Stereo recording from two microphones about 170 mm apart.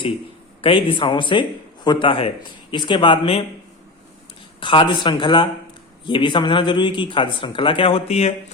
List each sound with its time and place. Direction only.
0.6 s speech: 30° left (ahead or behind)
4.6 s speech: 30° left (ahead or behind)